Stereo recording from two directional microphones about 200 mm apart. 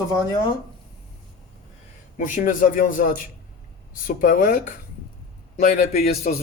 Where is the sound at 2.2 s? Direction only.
40° left (ahead or behind).